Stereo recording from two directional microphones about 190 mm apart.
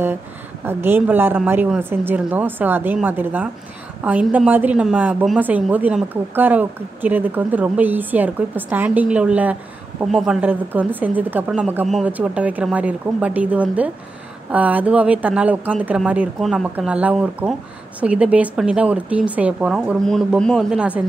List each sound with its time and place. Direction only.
0.7 s a woman's voice: 10° right (ahead or behind)